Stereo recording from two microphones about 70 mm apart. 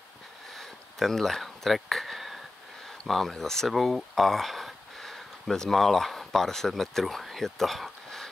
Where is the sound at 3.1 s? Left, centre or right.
Centre.